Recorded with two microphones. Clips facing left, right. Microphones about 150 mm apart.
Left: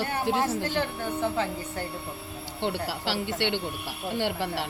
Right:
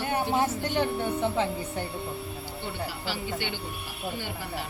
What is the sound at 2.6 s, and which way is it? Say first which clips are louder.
A woman's voice: left 7 dB; 75° left (ahead or behind).